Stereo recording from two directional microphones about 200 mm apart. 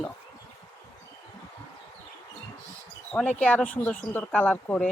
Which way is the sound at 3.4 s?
5° left (ahead or behind).